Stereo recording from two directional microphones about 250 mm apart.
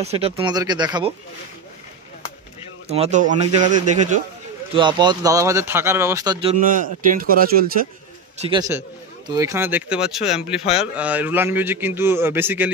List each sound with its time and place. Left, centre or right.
0.0 s a man's voice: right
2.9 s speech: right
4.7 s a man's voice: centre
6.6 s a man's voice: right
8.4 s a man's voice: centre